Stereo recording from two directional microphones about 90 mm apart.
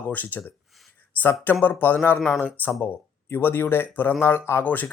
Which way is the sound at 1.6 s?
20° left (ahead or behind).